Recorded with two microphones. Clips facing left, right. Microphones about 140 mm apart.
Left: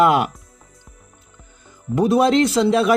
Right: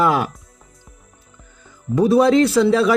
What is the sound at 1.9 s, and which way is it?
Speech, 15° left (ahead or behind).